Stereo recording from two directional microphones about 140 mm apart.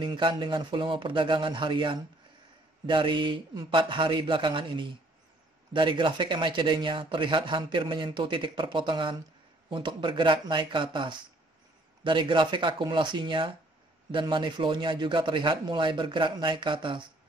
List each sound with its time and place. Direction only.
0.0 s speech: 35° right (ahead or behind)